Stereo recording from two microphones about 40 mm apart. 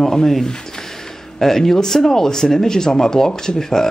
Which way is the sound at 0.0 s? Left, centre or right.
Centre.